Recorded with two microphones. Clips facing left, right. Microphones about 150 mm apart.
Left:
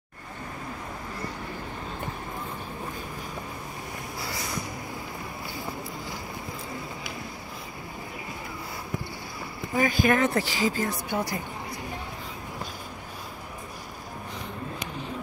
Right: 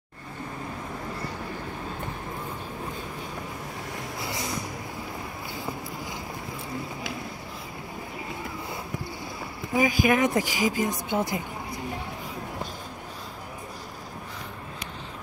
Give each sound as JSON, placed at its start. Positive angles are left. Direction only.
{"t": 9.8, "sound": "speech", "side_deg": -10}